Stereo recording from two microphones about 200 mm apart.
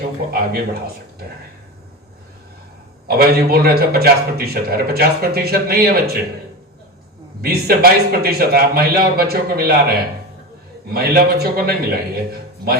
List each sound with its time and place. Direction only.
0.3 s a man's voice: 50° right (ahead or behind)
3.1 s a man's voice: 50° right (ahead or behind)
7.4 s a man's voice: 50° right (ahead or behind)
10.9 s a man's voice: 50° right (ahead or behind)